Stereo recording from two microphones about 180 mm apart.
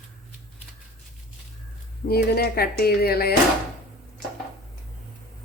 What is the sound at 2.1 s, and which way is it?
Speech, 55° left (ahead or behind).